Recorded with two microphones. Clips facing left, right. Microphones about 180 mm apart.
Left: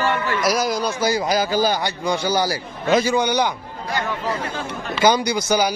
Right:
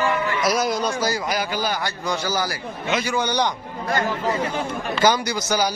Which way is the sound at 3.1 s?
10° left (ahead or behind).